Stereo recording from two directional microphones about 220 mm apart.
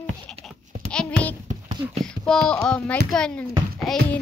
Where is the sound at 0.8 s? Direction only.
5° left (ahead or behind).